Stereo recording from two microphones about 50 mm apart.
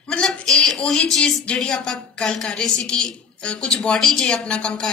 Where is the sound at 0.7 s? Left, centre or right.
Centre.